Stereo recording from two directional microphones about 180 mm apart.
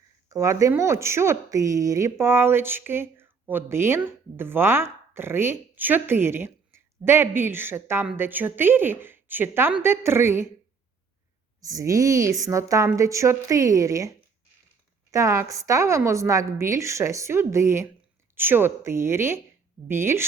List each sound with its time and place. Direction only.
0.3 s speech: 15° right (ahead or behind)
11.6 s speech: 20° right (ahead or behind)
15.1 s speech: 15° right (ahead or behind)